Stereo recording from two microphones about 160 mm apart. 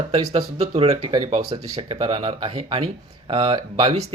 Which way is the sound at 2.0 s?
35° right (ahead or behind).